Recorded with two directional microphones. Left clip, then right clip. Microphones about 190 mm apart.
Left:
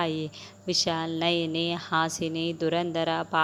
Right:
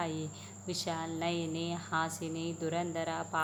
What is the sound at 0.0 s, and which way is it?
Speech, 35° left (ahead or behind).